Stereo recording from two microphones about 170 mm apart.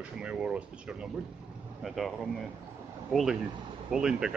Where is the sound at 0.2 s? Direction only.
5° right (ahead or behind).